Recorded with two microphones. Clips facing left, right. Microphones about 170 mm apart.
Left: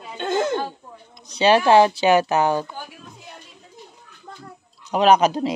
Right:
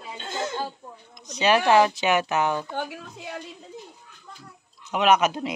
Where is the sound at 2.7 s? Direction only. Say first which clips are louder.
Right 6 dB; 80° right.